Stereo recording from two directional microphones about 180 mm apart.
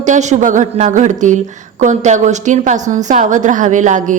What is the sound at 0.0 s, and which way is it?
A woman's voice, 40° right (ahead or behind).